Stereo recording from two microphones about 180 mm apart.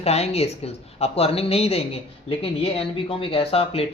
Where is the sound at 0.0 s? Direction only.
35° left (ahead or behind).